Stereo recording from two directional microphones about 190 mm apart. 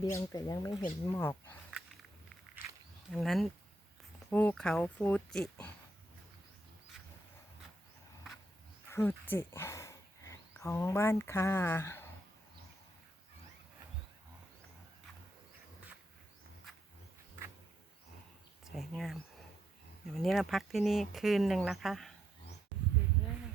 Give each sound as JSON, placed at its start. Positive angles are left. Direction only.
{"t": 0.0, "sound": "speech", "side_deg": 15}
{"t": 3.1, "sound": "speech", "side_deg": 0}
{"t": 8.9, "sound": "speech", "side_deg": 10}
{"t": 18.6, "sound": "speech", "side_deg": 0}